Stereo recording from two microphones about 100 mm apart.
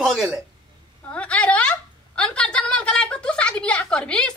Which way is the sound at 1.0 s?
10° left (ahead or behind).